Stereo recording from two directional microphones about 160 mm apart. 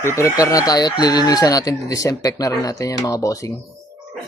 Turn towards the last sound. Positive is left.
turn(degrees=20)  # may be behind; listen again after turning